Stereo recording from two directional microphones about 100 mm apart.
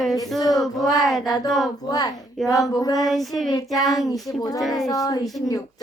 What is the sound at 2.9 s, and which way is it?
Child singing, centre (ahead or behind).